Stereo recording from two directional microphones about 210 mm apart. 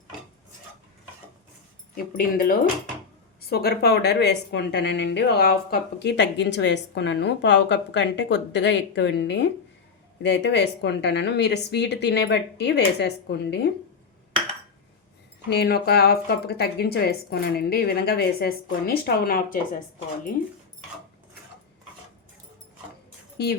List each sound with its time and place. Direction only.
2.1 s a woman's voice: 45° left (ahead or behind)
15.4 s speech: 50° left (ahead or behind)